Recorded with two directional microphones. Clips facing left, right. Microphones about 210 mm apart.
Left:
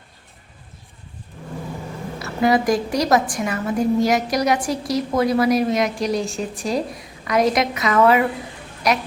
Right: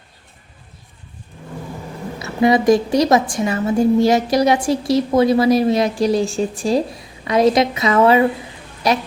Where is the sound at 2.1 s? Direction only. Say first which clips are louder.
Right 3 dB; 20° right (ahead or behind).